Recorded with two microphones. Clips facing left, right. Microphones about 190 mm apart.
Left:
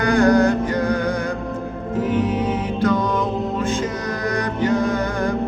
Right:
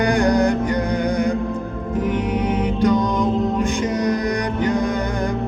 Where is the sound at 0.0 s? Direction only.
15° right (ahead or behind).